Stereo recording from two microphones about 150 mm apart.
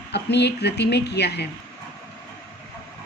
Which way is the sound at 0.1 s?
90° left.